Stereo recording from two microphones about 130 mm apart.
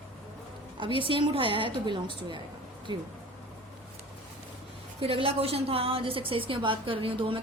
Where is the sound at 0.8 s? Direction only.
40° right (ahead or behind).